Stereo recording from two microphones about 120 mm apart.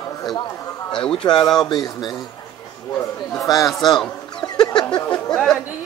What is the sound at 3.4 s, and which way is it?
Speech, 30° left (ahead or behind).